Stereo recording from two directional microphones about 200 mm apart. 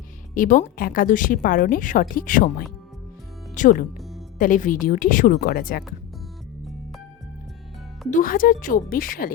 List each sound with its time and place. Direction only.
0.3 s a woman's voice: 40° left (ahead or behind)
3.9 s music: centre (ahead or behind)
4.4 s a woman's voice: 40° left (ahead or behind)
8.1 s a woman's voice: 45° left (ahead or behind)